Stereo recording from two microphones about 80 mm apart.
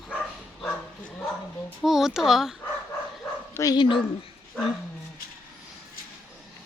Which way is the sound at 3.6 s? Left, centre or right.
Left.